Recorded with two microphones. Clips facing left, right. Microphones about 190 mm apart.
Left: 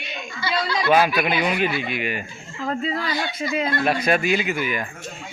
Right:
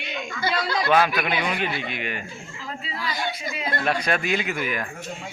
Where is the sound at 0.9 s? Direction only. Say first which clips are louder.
Left 3 dB; 10° left (ahead or behind).